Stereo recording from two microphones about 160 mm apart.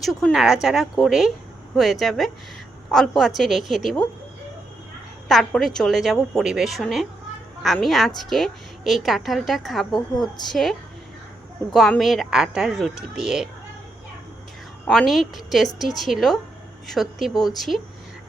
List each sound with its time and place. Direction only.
0.0 s a woman's voice: centre (ahead or behind)
5.3 s a woman's voice: centre (ahead or behind)
14.8 s a woman's voice: centre (ahead or behind)
17.3 s speech: 25° left (ahead or behind)